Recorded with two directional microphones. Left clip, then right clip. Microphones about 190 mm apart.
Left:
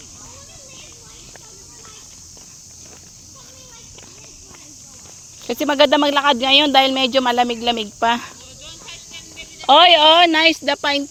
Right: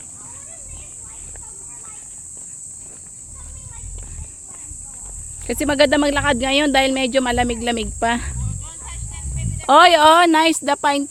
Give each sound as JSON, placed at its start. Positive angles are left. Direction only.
{"t": 5.5, "sound": "speech", "side_deg": -20}
{"t": 9.6, "sound": "speech", "side_deg": -35}